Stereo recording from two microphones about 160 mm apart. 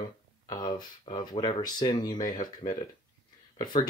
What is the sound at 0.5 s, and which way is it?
Speech, 25° left (ahead or behind).